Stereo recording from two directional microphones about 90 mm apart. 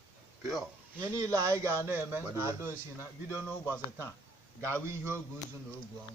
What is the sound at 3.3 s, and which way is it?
Speech, 20° left (ahead or behind).